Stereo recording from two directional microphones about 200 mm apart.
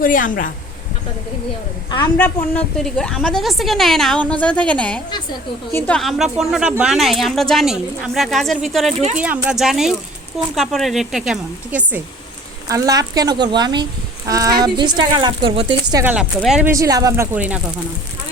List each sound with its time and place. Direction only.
0.0 s speech: 40° left (ahead or behind)
2.1 s a woman's voice: 5° left (ahead or behind); by 16.0 s 20° right (ahead or behind)
16.0 s speech: 5° right (ahead or behind)